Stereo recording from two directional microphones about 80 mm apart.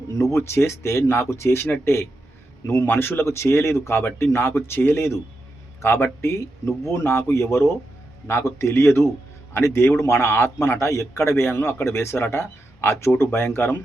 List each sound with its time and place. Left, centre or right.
0.3 s a man's voice: left